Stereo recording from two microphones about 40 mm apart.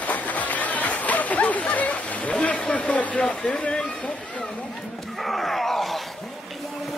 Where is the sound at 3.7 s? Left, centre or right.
Left.